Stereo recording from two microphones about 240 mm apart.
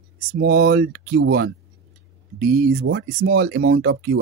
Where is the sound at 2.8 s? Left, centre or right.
Right.